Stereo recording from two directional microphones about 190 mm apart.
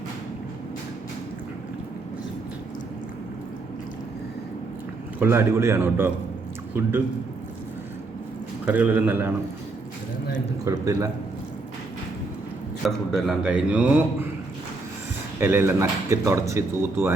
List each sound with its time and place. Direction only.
5.2 s speech: 15° right (ahead or behind)
8.6 s speech: 10° right (ahead or behind)
10.7 s speech: 15° right (ahead or behind)
12.8 s a man's voice: centre (ahead or behind)
15.4 s speech: 15° right (ahead or behind)